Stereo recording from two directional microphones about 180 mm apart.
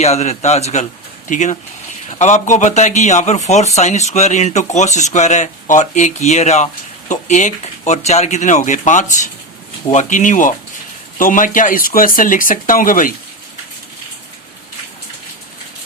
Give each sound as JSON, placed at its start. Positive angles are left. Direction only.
{"t": 0.0, "sound": "speech", "side_deg": 35}